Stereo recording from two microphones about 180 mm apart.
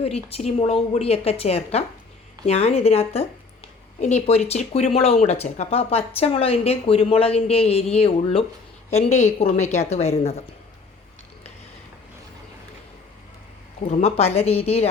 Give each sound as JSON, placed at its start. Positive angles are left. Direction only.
{"t": 0.0, "sound": "speech", "side_deg": 35}
{"t": 14.0, "sound": "speech", "side_deg": 35}